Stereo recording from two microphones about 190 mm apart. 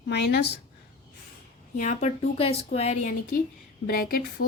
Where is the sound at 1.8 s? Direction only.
40° left (ahead or behind).